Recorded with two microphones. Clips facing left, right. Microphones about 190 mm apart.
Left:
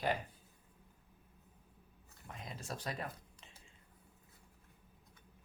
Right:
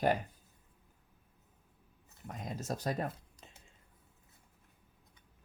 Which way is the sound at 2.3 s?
45° right (ahead or behind).